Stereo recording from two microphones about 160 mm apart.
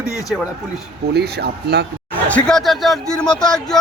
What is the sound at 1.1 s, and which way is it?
Speech, 90° right.